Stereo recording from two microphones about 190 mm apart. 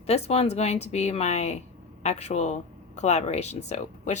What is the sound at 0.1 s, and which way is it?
Speech, 35° left (ahead or behind).